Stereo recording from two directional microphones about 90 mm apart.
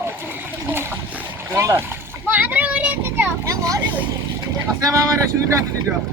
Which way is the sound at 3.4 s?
40° right (ahead or behind).